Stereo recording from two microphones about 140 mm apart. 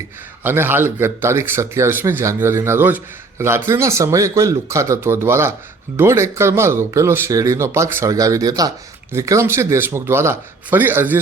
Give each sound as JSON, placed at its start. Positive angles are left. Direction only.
{"t": 0.4, "sound": "speech", "side_deg": -15}